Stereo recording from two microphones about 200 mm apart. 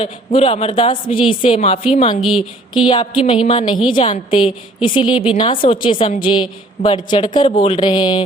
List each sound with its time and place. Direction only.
0.0 s a woman's voice: 30° left (ahead or behind)